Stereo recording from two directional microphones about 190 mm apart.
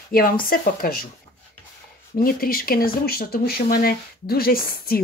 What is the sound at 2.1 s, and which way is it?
Speech, 50° left (ahead or behind).